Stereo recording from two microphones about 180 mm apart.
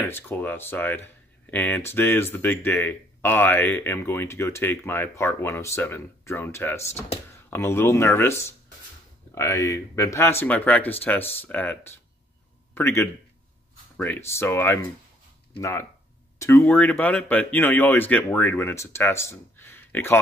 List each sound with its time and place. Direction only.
0.1 s speech: 10° left (ahead or behind)